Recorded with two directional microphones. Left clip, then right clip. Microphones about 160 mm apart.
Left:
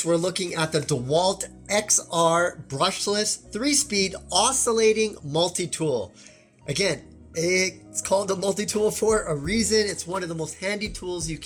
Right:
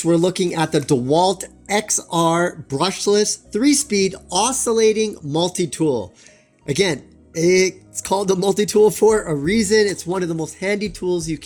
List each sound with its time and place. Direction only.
0.0 s speech: 45° right (ahead or behind)